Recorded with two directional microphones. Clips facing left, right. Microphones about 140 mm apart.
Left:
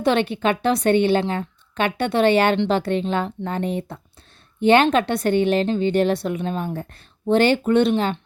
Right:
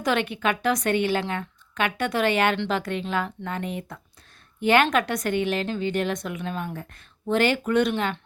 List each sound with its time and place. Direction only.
0.0 s speech: 30° left (ahead or behind)